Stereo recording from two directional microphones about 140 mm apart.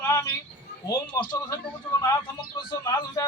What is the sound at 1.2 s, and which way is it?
Speech, 30° left (ahead or behind).